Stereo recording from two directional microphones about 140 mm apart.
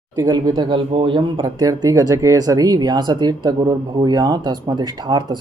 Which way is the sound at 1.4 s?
25° right (ahead or behind).